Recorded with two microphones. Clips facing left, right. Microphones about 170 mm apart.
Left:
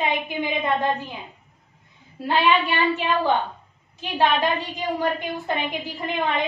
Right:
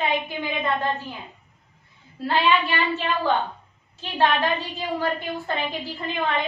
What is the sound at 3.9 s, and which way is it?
A woman's voice, 15° left (ahead or behind).